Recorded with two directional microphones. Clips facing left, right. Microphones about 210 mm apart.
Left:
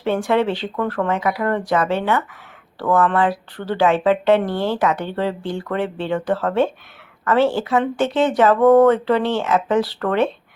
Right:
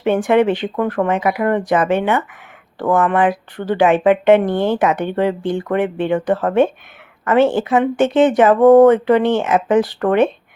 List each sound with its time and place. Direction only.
0.0 s speech: 20° right (ahead or behind)